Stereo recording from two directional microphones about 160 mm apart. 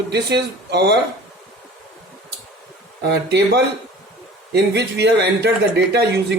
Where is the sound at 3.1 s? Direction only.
90° right.